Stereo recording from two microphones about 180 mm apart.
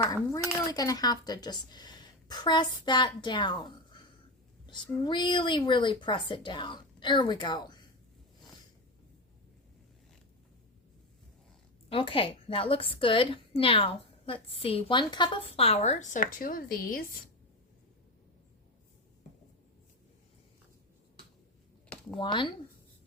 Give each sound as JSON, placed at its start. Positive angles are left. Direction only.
{"t": 0.0, "sound": "a woman's voice", "side_deg": 20}
{"t": 5.0, "sound": "a woman's voice", "side_deg": 25}
{"t": 11.9, "sound": "a woman's voice", "side_deg": 30}
{"t": 22.2, "sound": "a woman's voice", "side_deg": 25}